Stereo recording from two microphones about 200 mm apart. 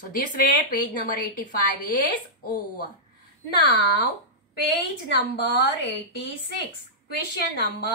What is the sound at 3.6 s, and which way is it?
Speech, 55° left (ahead or behind).